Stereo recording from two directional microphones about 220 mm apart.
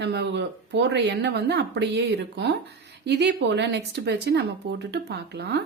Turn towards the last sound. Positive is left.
turn(degrees=-50)  # may be behind; listen again after turning